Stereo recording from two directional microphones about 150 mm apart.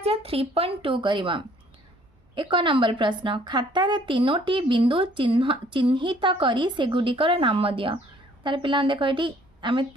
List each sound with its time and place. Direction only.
0.0 s a woman's voice: 40° right (ahead or behind)